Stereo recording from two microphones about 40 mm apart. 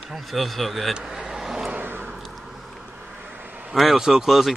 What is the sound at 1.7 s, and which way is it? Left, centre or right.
Vehicle, right.